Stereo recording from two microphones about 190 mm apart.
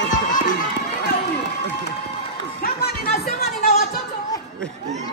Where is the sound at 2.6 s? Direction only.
55° left (ahead or behind).